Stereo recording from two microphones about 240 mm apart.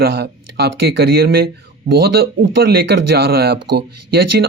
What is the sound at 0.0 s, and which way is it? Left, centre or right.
Speech, right.